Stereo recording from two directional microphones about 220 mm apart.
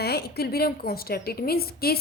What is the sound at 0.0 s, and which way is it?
A woman's voice, 45° left (ahead or behind).